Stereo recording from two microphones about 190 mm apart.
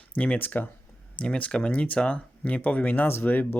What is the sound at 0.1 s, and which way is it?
Speech, 5° left (ahead or behind).